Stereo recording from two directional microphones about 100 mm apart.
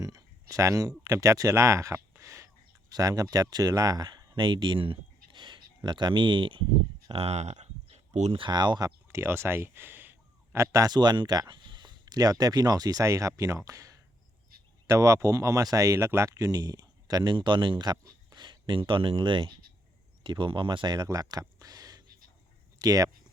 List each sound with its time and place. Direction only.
0.0 s speech: 35° right (ahead or behind); by 6.6 s 55° right (ahead or behind)
7.1 s speech: 90° right; by 8.9 s 45° right (ahead or behind)
9.0 s speech: 25° right (ahead or behind)